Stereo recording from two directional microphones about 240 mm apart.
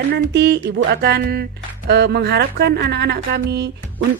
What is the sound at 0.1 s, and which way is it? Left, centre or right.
Speech, right.